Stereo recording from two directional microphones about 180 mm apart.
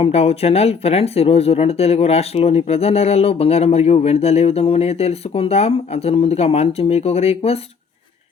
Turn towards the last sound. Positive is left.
turn(degrees=35)  # may be behind; listen again after turning